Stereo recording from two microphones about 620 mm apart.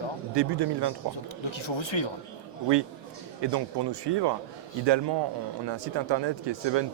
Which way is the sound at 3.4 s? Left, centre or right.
Right.